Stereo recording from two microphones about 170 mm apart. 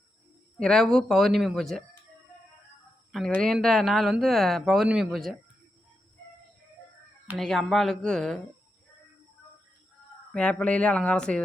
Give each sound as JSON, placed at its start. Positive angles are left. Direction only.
{"t": 0.6, "sound": "speech", "side_deg": 5}
{"t": 3.1, "sound": "speech", "side_deg": 0}
{"t": 7.3, "sound": "speech", "side_deg": 0}
{"t": 10.3, "sound": "speech", "side_deg": 5}